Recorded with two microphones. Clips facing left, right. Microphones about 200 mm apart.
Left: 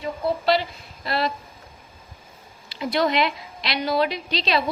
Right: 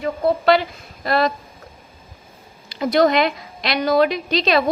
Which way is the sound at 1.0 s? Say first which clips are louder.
Right 6 dB; 50° right (ahead or behind).